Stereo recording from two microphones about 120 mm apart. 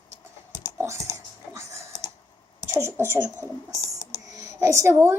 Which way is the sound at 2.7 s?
20° right (ahead or behind).